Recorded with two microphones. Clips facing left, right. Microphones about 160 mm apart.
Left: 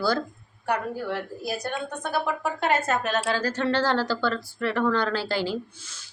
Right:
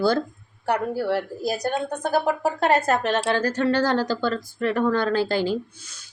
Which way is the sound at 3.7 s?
15° right (ahead or behind).